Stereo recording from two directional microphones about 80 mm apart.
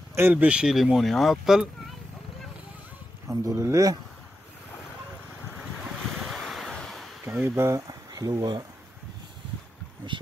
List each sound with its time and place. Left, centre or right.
0.2 s speech: centre
0.7 s speech: centre
3.3 s speech: right
6.2 s a sound: centre
7.3 s speech: right
8.1 s speech: right